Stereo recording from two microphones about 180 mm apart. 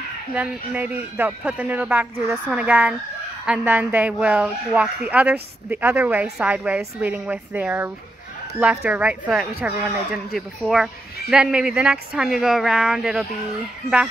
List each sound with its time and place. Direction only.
0.3 s a woman's voice: 5° right (ahead or behind)